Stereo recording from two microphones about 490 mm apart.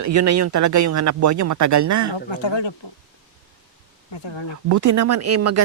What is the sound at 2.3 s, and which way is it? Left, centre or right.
Speech, left.